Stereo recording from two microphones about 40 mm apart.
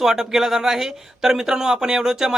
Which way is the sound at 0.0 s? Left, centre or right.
Centre.